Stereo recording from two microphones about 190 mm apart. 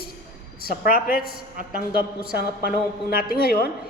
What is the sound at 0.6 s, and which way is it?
Speech, 50° left (ahead or behind).